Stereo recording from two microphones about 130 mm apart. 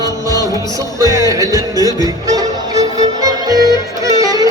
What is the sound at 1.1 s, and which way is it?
Music, 25° right (ahead or behind).